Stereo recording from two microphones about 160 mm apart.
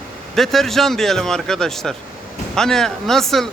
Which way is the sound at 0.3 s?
Centre (ahead or behind).